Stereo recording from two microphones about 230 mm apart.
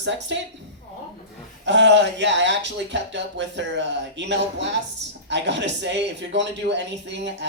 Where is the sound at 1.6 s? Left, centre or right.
Right.